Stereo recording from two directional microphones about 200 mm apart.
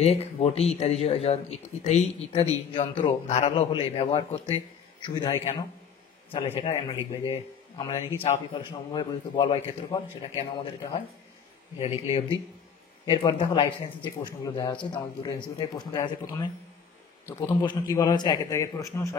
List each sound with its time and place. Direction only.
0.0 s a man's voice: 30° left (ahead or behind); by 19.1 s 15° left (ahead or behind)